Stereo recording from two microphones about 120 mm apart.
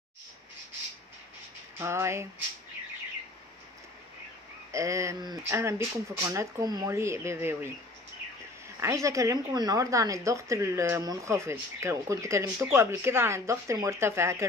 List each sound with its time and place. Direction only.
1.8 s a woman's voice: 20° right (ahead or behind)
4.7 s a woman's voice: 25° right (ahead or behind)